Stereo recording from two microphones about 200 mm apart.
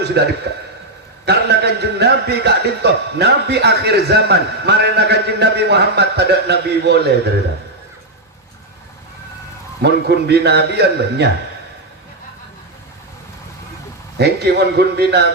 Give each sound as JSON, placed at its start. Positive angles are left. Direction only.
{"t": 0.2, "sound": "a man's voice", "side_deg": -55}
{"t": 9.8, "sound": "a man's voice", "side_deg": -55}
{"t": 14.2, "sound": "a man's voice", "side_deg": -55}